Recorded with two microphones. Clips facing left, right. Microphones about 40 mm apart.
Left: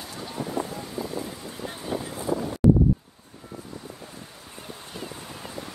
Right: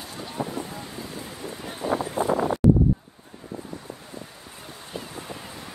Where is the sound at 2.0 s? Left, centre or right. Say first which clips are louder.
Right 7 dB; right.